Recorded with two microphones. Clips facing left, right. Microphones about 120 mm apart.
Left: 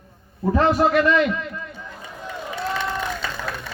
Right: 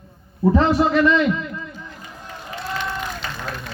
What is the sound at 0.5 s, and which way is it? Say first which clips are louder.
Speech: left 1 dB; 25° right (ahead or behind).